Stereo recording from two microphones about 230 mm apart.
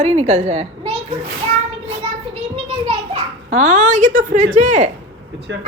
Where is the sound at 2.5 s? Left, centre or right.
Right.